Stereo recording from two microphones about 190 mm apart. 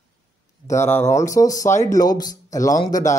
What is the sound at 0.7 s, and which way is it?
Speech, 15° left (ahead or behind).